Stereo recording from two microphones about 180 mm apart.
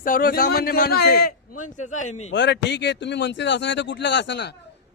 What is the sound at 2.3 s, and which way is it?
A man's voice, 75° left (ahead or behind).